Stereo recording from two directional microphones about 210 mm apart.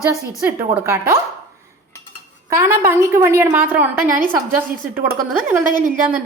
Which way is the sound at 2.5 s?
10° right (ahead or behind).